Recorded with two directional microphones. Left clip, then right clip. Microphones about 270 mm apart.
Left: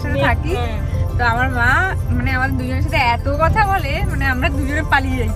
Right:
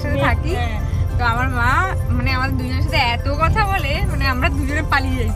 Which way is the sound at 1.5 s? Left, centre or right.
Centre.